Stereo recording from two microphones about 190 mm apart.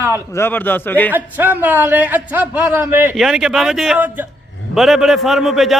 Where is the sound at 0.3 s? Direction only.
10° left (ahead or behind).